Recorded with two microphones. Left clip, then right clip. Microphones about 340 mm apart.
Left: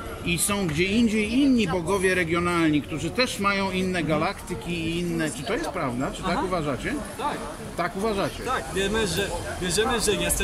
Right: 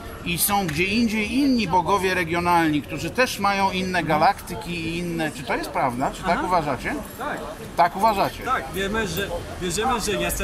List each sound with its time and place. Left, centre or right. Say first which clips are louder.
0.3 s speech: right 4 dB; centre
7.7 s speech: right 8 dB; centre
8.5 s speech: right 2 dB; centre